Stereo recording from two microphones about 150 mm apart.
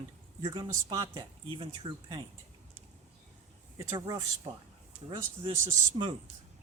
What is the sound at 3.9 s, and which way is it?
Speech, 25° right (ahead or behind).